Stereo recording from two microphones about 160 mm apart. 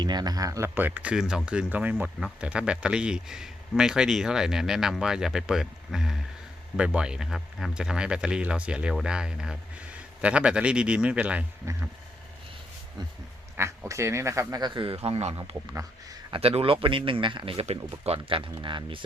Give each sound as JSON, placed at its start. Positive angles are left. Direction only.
{"t": 0.0, "sound": "speech", "side_deg": -25}
{"t": 13.6, "sound": "speech", "side_deg": -20}
{"t": 15.4, "sound": "speech", "side_deg": -20}
{"t": 16.3, "sound": "speech", "side_deg": -40}